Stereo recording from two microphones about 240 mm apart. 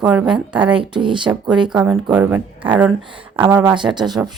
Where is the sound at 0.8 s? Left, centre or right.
Centre.